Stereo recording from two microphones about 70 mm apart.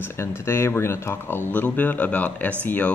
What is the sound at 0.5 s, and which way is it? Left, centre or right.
Speech, left.